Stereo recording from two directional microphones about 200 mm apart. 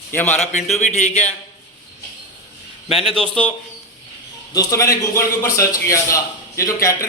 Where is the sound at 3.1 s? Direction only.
5° left (ahead or behind).